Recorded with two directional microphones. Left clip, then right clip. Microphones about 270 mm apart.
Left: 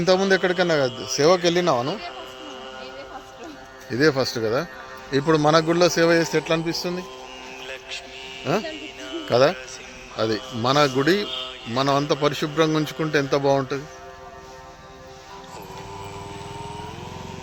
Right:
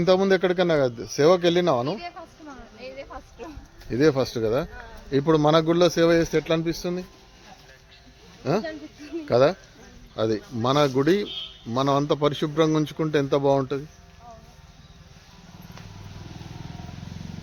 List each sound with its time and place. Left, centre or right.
0.0 s a man's voice: centre
3.8 s a man's voice: centre
8.4 s a man's voice: centre